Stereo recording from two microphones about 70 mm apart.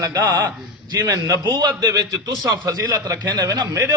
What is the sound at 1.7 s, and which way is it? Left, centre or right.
A man's voice, right.